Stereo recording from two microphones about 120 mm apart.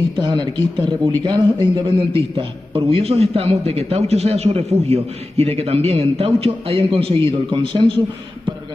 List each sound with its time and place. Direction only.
0.2 s a man's voice: 40° right (ahead or behind)